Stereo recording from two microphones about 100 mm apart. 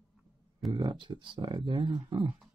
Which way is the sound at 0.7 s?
55° right (ahead or behind).